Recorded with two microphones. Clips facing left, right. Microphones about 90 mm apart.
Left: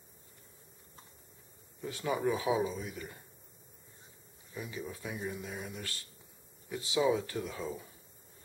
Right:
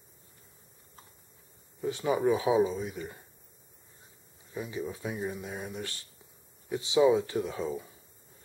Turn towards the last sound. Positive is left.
turn(degrees=-20)  # may be behind; listen again after turning